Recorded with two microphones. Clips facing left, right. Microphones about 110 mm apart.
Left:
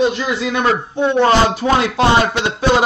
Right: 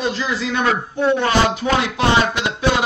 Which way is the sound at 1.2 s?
35° left (ahead or behind).